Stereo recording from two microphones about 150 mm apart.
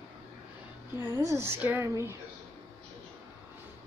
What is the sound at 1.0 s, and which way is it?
A woman's voice, 20° right (ahead or behind).